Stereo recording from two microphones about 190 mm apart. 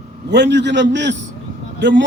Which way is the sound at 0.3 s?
65° right (ahead or behind).